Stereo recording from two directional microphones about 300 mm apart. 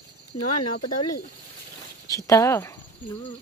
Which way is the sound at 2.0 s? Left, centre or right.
Centre.